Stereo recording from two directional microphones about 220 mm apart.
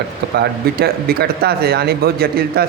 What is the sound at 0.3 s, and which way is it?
A man's voice, 45° right (ahead or behind).